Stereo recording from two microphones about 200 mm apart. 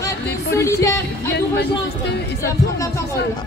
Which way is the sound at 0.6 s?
15° left (ahead or behind).